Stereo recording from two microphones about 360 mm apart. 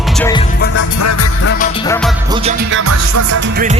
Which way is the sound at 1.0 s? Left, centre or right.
Left.